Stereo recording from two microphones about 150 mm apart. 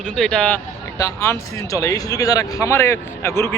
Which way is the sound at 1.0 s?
20° left (ahead or behind).